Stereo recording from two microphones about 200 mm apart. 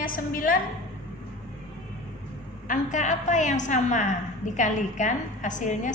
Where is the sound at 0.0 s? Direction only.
45° left (ahead or behind).